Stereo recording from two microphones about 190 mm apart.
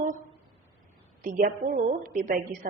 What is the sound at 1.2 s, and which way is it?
A woman's voice, 45° right (ahead or behind).